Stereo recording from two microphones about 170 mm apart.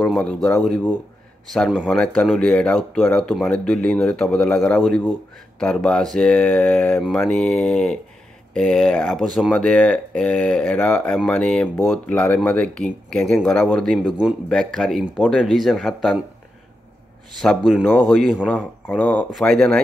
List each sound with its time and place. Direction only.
0.1 s speech: 5° left (ahead or behind)
17.4 s speech: centre (ahead or behind)